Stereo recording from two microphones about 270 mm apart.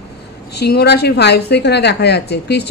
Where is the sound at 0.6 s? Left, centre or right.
Left.